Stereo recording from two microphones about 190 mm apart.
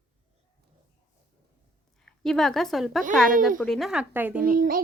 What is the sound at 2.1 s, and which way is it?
A woman's voice, centre (ahead or behind).